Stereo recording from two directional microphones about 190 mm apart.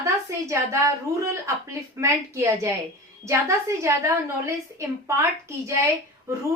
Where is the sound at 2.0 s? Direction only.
15° right (ahead or behind).